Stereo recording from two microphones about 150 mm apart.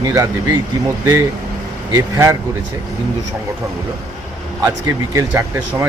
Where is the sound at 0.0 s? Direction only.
20° right (ahead or behind).